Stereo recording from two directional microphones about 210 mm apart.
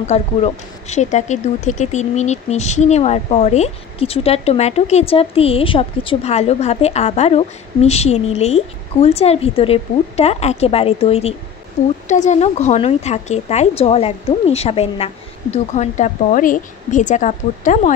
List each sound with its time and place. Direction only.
0.0 s speech: 30° left (ahead or behind)